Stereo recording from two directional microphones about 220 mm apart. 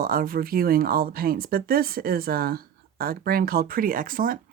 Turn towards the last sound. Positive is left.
turn(degrees=-40)  # may be behind; listen again after turning